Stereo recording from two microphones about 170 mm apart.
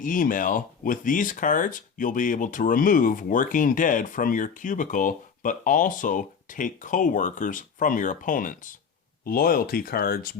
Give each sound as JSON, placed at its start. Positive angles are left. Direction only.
{"t": 0.0, "sound": "speech", "side_deg": 50}